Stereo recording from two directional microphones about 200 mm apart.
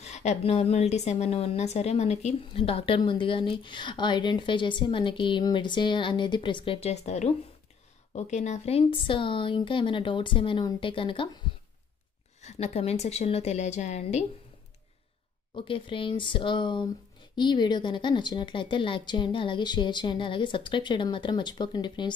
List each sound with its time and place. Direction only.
0.0 s a woman's voice: 35° left (ahead or behind)
12.4 s a woman's voice: 35° left (ahead or behind)
15.5 s a woman's voice: 25° left (ahead or behind)